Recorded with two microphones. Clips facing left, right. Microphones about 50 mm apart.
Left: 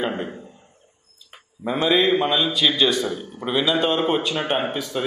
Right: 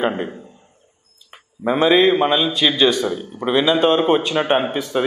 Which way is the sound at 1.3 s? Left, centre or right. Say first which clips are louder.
Right 6 dB; right.